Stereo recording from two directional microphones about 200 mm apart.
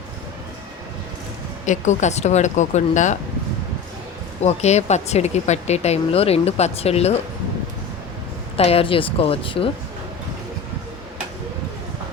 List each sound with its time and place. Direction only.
1.6 s speech: 35° left (ahead or behind)
4.4 s speech: 35° left (ahead or behind)
8.5 s a woman's voice: 30° left (ahead or behind)